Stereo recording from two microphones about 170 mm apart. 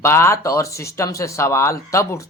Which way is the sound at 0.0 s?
15° left (ahead or behind).